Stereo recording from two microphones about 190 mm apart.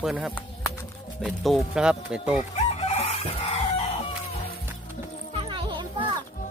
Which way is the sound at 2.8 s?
30° left (ahead or behind).